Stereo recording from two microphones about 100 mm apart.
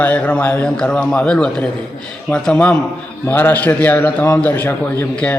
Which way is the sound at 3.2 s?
20° left (ahead or behind).